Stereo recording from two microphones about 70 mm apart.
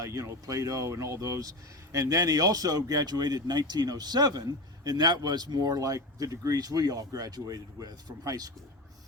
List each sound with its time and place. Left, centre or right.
0.1 s speech: right